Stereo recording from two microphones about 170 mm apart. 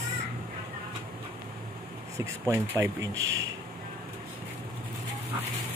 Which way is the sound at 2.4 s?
15° right (ahead or behind).